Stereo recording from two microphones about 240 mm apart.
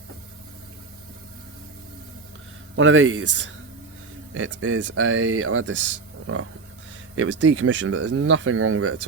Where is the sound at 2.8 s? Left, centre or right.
Right.